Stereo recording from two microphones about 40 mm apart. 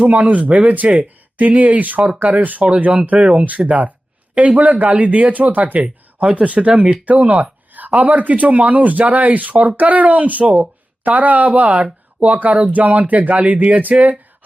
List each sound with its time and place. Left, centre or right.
0.0 s speech: right